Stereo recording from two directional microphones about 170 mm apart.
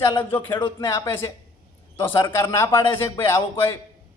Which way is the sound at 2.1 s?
20° left (ahead or behind).